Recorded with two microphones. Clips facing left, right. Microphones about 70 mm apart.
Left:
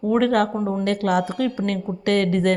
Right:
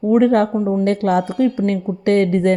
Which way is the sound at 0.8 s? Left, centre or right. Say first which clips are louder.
Right 2 dB; right.